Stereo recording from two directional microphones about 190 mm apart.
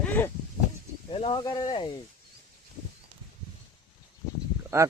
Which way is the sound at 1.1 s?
30° left (ahead or behind).